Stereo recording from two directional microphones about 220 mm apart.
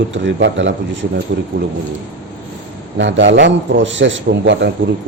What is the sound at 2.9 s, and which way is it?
A man's voice, 55° right (ahead or behind).